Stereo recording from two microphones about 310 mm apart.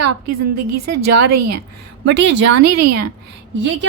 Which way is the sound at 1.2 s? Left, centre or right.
Right.